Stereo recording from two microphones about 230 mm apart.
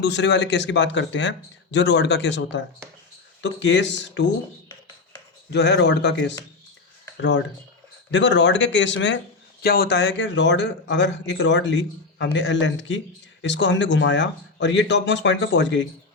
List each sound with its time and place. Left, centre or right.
0.0 s speech: left
5.5 s speech: left